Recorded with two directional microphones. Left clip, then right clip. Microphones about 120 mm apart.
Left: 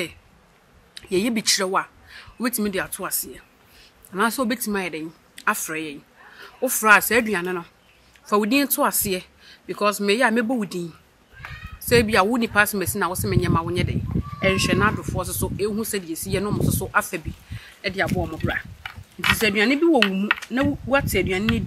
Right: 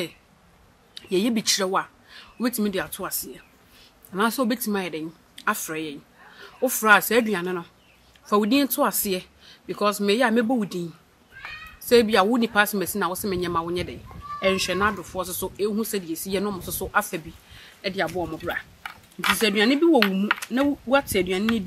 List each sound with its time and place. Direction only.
0.9 s speech: 10° left (ahead or behind)
18.4 s a sound: 10° right (ahead or behind)
19.3 s speech: centre (ahead or behind)